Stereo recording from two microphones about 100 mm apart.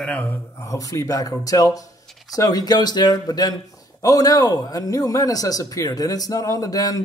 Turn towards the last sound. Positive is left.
turn(degrees=35)  # may be behind; listen again after turning